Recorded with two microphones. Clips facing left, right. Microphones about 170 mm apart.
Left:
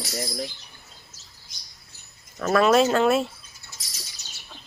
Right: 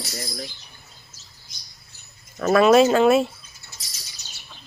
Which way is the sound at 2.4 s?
5° right (ahead or behind).